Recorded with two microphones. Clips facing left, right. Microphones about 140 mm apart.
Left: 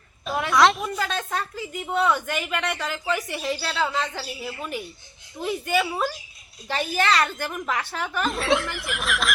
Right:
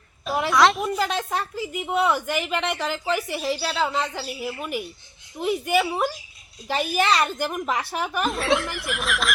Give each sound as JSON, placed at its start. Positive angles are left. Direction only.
{"t": 0.3, "sound": "speech", "side_deg": 0}
{"t": 0.9, "sound": "speech", "side_deg": -10}
{"t": 2.5, "sound": "speech", "side_deg": -20}
{"t": 2.8, "sound": "speech", "side_deg": -5}
{"t": 8.3, "sound": "speech", "side_deg": 0}